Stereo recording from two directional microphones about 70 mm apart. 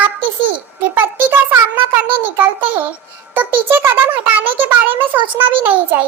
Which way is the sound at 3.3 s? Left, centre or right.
Right.